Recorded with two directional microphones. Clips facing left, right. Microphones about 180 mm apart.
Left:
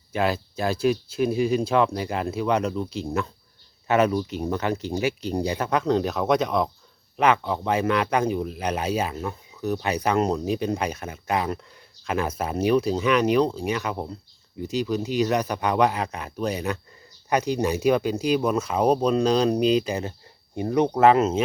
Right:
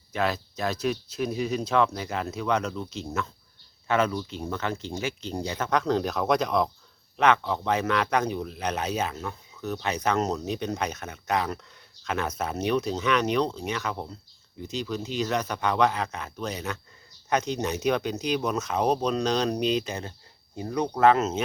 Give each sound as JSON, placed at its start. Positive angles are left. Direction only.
{"t": 0.1, "sound": "speech", "side_deg": 10}
{"t": 21.1, "sound": "speech", "side_deg": 10}